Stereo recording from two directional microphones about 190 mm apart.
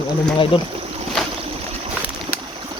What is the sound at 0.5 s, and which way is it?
Speech, 30° left (ahead or behind).